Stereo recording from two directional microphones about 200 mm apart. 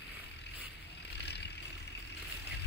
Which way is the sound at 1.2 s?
55° left (ahead or behind).